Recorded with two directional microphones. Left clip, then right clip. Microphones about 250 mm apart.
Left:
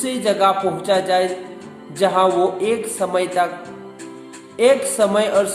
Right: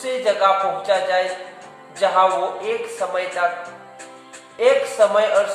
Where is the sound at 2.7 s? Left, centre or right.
Left.